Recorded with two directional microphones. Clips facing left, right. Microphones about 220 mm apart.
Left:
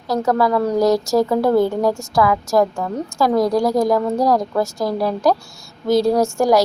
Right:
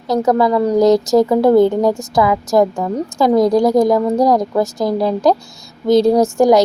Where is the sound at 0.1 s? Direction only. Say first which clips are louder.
Right 4 dB; 20° right (ahead or behind).